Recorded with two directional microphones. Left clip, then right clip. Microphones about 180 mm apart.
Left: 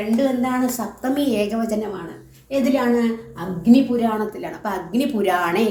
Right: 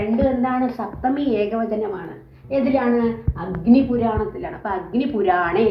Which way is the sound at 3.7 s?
40° left (ahead or behind).